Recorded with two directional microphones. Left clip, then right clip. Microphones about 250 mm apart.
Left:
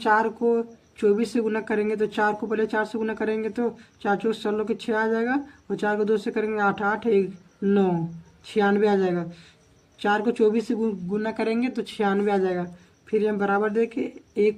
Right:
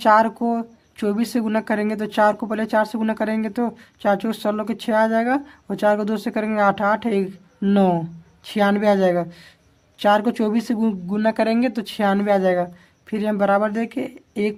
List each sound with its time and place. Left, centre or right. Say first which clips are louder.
0.0 s speech: right 5 dB; right